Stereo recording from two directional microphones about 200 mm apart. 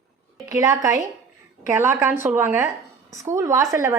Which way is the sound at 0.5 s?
15° right (ahead or behind).